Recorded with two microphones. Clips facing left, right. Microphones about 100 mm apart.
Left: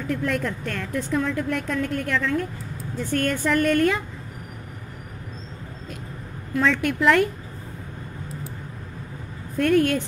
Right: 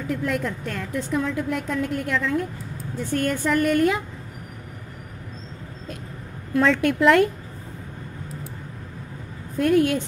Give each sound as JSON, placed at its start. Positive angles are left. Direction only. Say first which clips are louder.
{"t": 0.0, "sound": "a woman's voice", "louder": "even", "side_deg": -10}
{"t": 6.5, "sound": "speech", "louder": "right 3 dB", "side_deg": -25}
{"t": 9.6, "sound": "a woman's voice", "louder": "even", "side_deg": -15}